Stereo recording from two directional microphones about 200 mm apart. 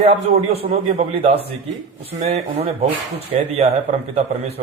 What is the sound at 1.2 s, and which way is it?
Speech, 30° right (ahead or behind).